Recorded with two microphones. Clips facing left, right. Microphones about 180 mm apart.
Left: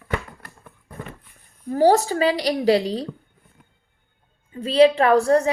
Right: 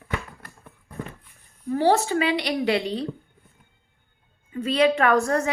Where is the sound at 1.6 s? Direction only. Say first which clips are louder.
Left 4 dB; 40° left (ahead or behind).